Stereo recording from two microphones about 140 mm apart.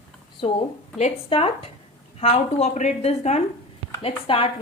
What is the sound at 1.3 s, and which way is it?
A woman's voice, 40° left (ahead or behind).